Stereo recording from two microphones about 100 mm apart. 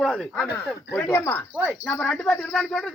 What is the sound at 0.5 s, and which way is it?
Speech, 20° left (ahead or behind).